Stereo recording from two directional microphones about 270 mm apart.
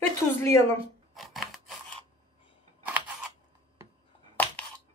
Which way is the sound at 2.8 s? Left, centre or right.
Centre.